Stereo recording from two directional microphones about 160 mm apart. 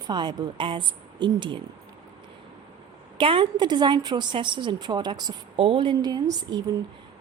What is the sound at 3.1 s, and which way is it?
Speech, 30° right (ahead or behind).